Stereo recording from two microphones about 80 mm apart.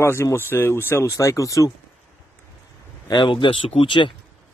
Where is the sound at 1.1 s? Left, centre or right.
Left.